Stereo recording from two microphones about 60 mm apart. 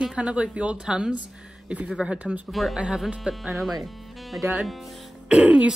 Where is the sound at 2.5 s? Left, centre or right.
Centre.